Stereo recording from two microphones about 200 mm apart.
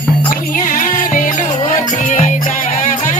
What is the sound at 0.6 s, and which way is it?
Music, 40° left (ahead or behind).